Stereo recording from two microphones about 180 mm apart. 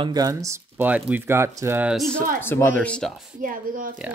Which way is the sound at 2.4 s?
15° left (ahead or behind).